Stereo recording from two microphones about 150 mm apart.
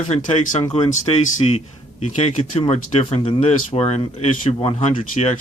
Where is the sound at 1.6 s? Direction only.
45° left (ahead or behind).